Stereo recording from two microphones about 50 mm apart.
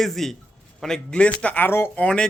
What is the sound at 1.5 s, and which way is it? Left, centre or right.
Speech, left.